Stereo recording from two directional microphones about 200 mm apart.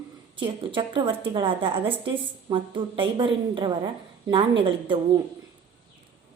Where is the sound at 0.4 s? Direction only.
25° right (ahead or behind).